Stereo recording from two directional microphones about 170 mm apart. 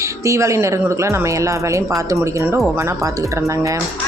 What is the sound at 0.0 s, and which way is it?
Speech, 15° right (ahead or behind).